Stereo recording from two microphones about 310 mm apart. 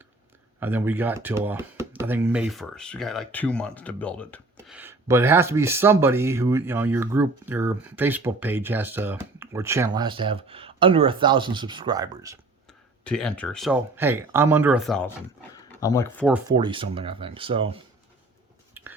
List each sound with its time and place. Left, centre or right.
0.6 s speech: centre
13.1 s speech: centre
16.6 s speech: centre
18.8 s a sound: centre